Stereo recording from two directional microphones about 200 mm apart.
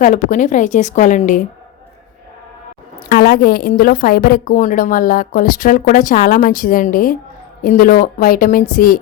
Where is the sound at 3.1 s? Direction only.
50° left (ahead or behind).